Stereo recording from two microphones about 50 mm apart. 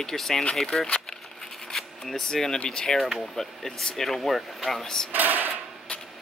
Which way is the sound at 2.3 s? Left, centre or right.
Centre.